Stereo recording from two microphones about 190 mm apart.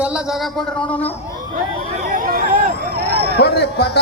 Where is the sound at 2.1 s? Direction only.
45° right (ahead or behind).